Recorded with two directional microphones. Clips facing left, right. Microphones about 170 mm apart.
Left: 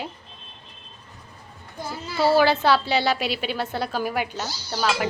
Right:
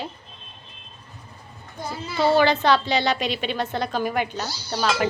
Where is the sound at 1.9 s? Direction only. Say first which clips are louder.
Even; 5° left (ahead or behind).